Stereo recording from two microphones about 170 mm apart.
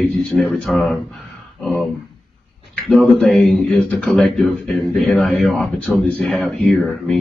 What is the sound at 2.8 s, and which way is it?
Speech, centre (ahead or behind).